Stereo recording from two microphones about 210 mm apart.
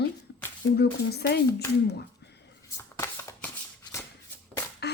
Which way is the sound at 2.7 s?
15° left (ahead or behind).